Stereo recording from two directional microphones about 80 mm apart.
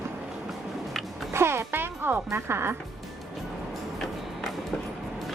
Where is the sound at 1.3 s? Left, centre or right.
Right.